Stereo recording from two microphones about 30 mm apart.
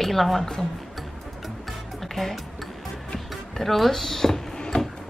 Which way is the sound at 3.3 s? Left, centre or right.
Centre.